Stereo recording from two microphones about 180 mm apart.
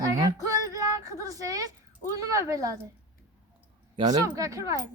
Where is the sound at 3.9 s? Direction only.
25° right (ahead or behind).